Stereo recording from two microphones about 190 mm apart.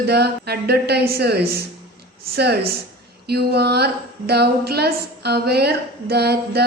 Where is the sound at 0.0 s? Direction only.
60° right (ahead or behind).